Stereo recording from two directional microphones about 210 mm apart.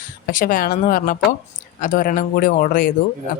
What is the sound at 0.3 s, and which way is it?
Speech, 40° left (ahead or behind).